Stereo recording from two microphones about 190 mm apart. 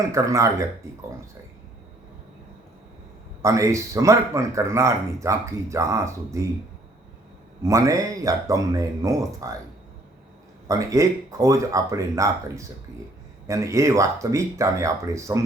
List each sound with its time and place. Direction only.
0.0 s speech: 15° right (ahead or behind)
3.4 s speech: 15° right (ahead or behind)
7.6 s speech: 15° right (ahead or behind)
10.7 s speech: 15° right (ahead or behind)